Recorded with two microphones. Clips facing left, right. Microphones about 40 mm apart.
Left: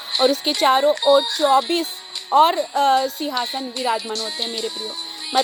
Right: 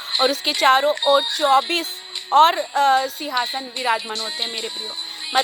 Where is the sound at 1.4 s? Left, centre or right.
Right.